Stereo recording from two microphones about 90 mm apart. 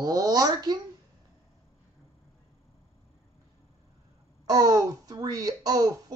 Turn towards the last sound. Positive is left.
turn(degrees=-45)  # may be behind; listen again after turning